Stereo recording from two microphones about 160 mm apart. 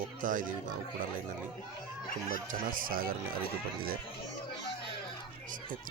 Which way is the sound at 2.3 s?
60° right (ahead or behind).